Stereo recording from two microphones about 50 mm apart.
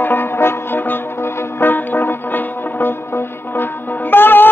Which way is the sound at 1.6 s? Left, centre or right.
Left.